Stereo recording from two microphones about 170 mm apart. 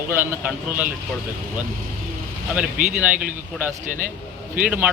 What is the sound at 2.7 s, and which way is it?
Speech, 50° right (ahead or behind).